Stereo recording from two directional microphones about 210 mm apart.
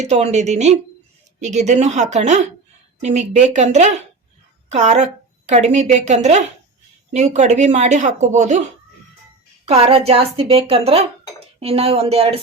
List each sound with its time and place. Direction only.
0.0 s speech: 30° right (ahead or behind)
9.6 s a woman's voice: 30° right (ahead or behind)